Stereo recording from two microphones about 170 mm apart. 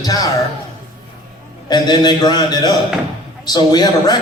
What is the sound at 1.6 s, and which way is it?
A man's voice, 25° left (ahead or behind).